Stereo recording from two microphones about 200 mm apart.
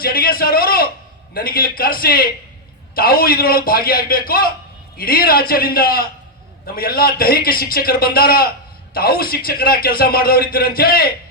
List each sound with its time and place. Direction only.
0.0 s a man's voice: 50° left (ahead or behind)